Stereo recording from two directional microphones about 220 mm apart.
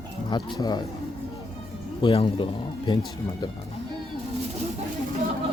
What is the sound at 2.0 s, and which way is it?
Speech, 25° left (ahead or behind).